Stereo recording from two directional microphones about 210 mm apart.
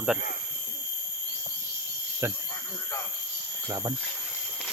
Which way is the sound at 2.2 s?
10° right (ahead or behind).